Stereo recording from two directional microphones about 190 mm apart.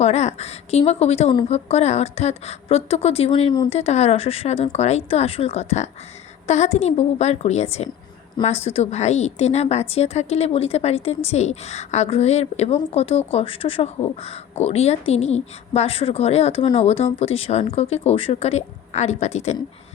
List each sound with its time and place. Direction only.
0.0 s a woman's voice: 35° left (ahead or behind)